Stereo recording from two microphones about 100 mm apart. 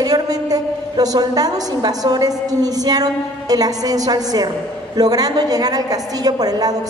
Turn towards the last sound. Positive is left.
turn(degrees=-40)  # may be behind; listen again after turning